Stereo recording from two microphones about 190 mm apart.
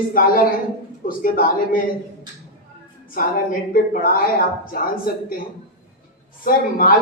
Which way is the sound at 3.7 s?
45° left (ahead or behind).